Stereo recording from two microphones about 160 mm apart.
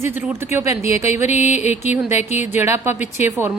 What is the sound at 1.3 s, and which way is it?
Music, 45° left (ahead or behind).